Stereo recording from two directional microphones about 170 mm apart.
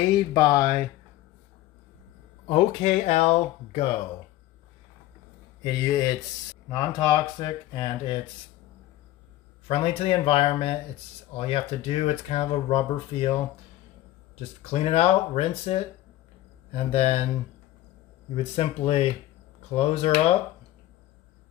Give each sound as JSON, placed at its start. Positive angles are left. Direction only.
{"t": 0.3, "sound": "speech", "side_deg": 20}
{"t": 2.4, "sound": "speech", "side_deg": 35}
{"t": 5.6, "sound": "speech", "side_deg": 20}
{"t": 9.7, "sound": "speech", "side_deg": 35}
{"t": 14.6, "sound": "speech", "side_deg": 35}
{"t": 18.3, "sound": "speech", "side_deg": 35}